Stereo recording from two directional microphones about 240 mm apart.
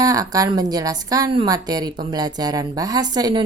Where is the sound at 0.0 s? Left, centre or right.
Centre.